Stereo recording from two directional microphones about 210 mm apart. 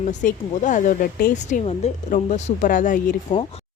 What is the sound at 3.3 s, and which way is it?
Speech, 30° left (ahead or behind).